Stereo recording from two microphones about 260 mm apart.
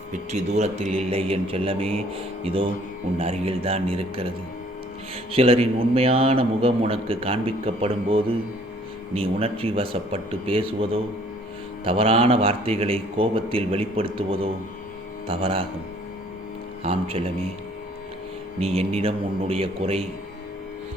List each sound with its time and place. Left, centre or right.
0.1 s a man's voice: right
5.3 s a man's voice: right
16.8 s a man's voice: right
18.6 s a man's voice: right